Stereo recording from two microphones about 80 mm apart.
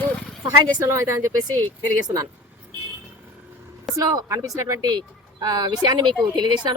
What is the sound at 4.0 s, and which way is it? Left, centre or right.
Speech, right.